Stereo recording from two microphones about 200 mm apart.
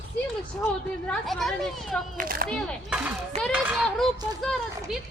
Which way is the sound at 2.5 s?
5° left (ahead or behind).